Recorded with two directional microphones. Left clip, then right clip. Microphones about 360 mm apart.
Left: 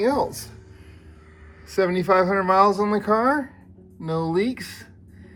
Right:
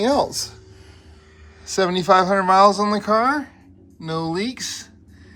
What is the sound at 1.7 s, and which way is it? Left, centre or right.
Speech, centre.